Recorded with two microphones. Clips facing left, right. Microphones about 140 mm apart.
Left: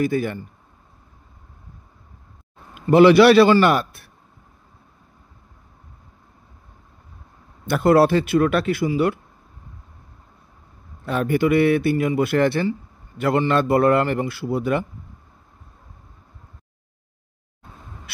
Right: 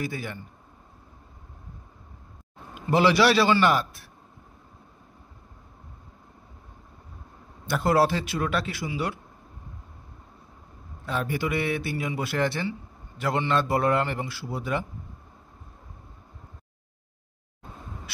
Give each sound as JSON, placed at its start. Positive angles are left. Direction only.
{"t": 0.0, "sound": "speech", "side_deg": 55}
{"t": 2.9, "sound": "a man's voice", "side_deg": 55}
{"t": 7.6, "sound": "a man's voice", "side_deg": 60}
{"t": 11.1, "sound": "a man's voice", "side_deg": 55}